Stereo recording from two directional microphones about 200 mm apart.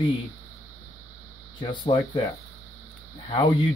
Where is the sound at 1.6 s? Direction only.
25° left (ahead or behind).